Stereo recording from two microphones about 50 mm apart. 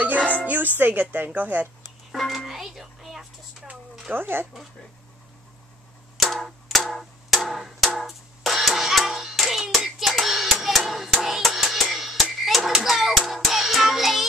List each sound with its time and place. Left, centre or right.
0.0 s dog: right
0.7 s speech: right
1.1 s speech: right
2.1 s music: centre
4.1 s speech: right
6.1 s music: centre